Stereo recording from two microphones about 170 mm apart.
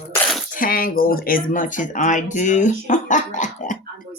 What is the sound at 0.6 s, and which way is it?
Speech, 55° left (ahead or behind).